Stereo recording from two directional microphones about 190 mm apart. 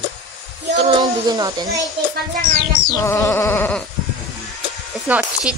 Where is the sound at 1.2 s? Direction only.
20° right (ahead or behind).